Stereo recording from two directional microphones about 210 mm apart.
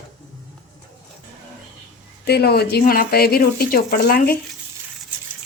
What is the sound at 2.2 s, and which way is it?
Speech, 50° left (ahead or behind).